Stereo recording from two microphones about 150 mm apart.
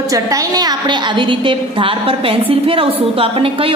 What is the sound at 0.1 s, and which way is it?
A woman's voice, 25° right (ahead or behind).